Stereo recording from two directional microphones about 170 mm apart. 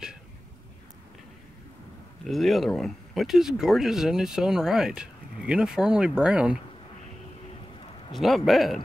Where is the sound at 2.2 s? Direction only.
Centre (ahead or behind).